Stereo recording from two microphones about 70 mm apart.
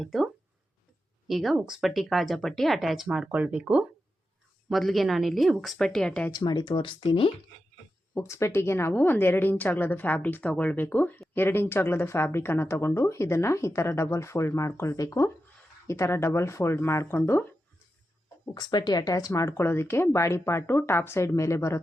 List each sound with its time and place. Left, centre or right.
0.0 s speech: centre
1.3 s speech: centre
3.2 s speech: right
4.7 s speech: centre
5.8 s speech: centre
6.3 s speech: left
8.1 s a woman's voice: left
18.4 s speech: left